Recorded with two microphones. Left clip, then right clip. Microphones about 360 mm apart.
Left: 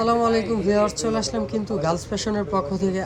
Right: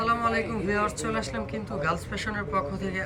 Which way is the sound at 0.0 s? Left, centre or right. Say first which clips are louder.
Left 5 dB; centre.